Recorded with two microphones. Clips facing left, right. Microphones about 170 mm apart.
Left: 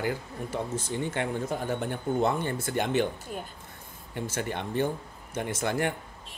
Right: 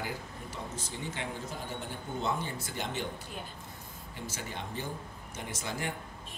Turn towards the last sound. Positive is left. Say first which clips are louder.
# left 8 dB
turn(degrees=60)  # may be behind; listen again after turning